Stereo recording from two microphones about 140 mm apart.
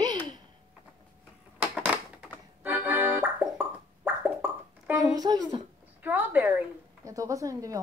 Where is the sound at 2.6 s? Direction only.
15° right (ahead or behind).